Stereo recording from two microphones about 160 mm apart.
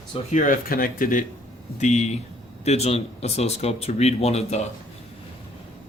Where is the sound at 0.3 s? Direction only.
55° left (ahead or behind).